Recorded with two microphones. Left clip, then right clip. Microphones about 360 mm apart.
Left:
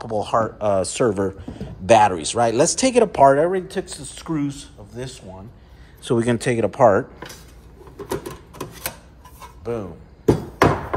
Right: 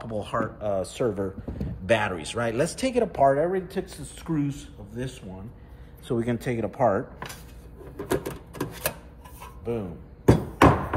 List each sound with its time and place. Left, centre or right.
0.0 s speech: centre
0.6 s speech: left
1.9 s speech: centre
6.0 s speech: left
9.7 s a sound: centre